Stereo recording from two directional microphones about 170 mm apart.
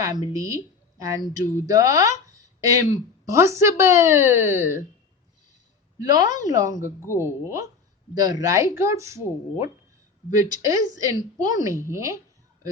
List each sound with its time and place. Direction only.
0.0 s a woman's voice: 20° right (ahead or behind)
6.0 s a woman's voice: 20° right (ahead or behind)